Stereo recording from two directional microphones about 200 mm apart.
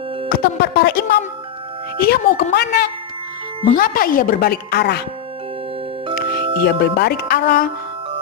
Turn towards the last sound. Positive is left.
turn(degrees=50)  # may be behind; listen again after turning